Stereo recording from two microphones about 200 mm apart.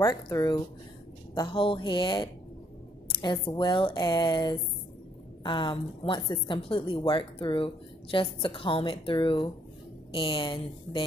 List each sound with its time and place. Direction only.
0.0 s a woman's voice: 20° left (ahead or behind)